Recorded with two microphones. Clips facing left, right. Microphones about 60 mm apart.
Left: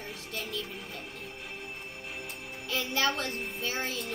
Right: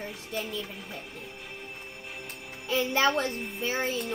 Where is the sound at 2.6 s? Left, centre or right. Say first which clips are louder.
Right 5 dB; centre.